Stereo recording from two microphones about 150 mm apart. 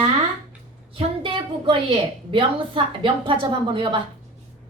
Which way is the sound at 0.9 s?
35° right (ahead or behind).